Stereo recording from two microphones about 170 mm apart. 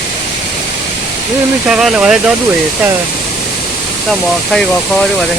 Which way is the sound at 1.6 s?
5° right (ahead or behind).